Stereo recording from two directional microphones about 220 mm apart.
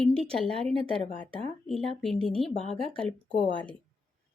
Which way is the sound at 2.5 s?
30° left (ahead or behind).